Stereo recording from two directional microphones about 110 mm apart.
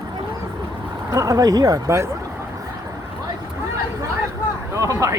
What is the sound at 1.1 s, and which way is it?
Speech, 30° right (ahead or behind).